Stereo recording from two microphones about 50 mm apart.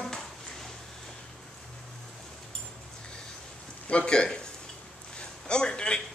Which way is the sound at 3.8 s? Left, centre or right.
Left.